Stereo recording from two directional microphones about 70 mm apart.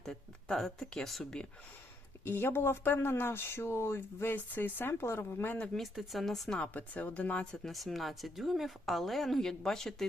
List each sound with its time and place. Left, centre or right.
0.0 s speech: centre
2.2 s speech: left
5.5 s speech: centre
5.8 s a woman's voice: centre
6.7 s speech: left
7.5 s a woman's voice: centre